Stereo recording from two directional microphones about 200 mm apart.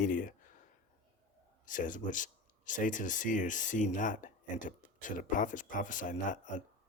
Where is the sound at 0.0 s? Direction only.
45° left (ahead or behind).